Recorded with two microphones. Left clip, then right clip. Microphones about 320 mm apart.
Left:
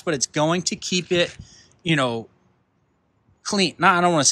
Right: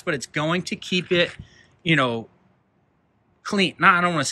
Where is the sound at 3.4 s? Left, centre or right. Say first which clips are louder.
Right 1 dB; centre.